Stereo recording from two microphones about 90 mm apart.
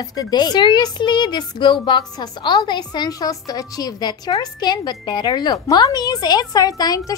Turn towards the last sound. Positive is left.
turn(degrees=45)  # may be behind; listen again after turning